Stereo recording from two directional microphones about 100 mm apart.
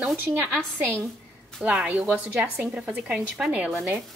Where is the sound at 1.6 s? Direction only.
15° right (ahead or behind).